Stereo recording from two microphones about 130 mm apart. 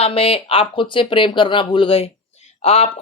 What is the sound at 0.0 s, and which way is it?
A man's voice, 45° left (ahead or behind).